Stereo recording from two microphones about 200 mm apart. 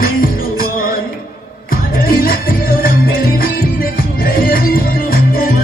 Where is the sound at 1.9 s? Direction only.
45° left (ahead or behind).